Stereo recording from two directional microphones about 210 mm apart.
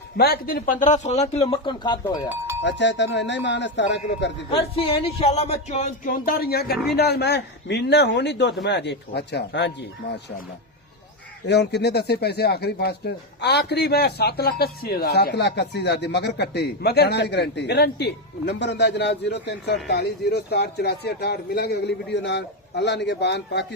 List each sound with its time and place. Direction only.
0.2 s speech: 45° left (ahead or behind); by 2.3 s 20° left (ahead or behind)
2.6 s speech: 55° left (ahead or behind)
4.5 s speech: 25° left (ahead or behind); by 9.7 s 55° left (ahead or behind)
11.4 s speech: 55° left (ahead or behind)